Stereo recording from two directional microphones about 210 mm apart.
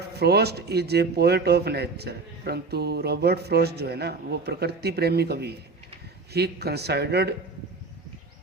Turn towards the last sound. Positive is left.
turn(degrees=-50)  # may be behind; listen again after turning